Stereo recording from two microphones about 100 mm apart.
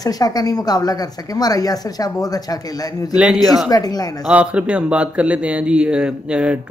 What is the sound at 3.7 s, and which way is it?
Speech, 40° left (ahead or behind).